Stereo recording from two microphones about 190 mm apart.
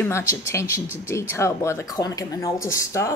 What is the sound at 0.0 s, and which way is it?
Speech, 15° left (ahead or behind).